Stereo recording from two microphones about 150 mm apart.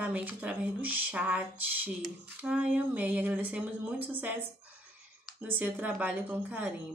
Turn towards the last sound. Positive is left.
turn(degrees=-10)  # may be behind; listen again after turning